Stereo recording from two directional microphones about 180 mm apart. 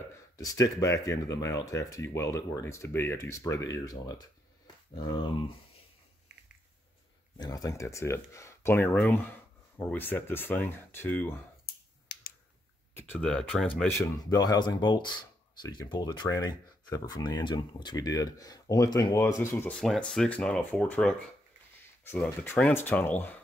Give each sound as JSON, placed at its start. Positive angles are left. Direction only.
{"t": 0.4, "sound": "speech", "side_deg": 20}
{"t": 7.3, "sound": "speech", "side_deg": 20}
{"t": 11.6, "sound": "finger snapping", "side_deg": 55}
{"t": 12.9, "sound": "speech", "side_deg": 5}
{"t": 13.7, "sound": "speech", "side_deg": 15}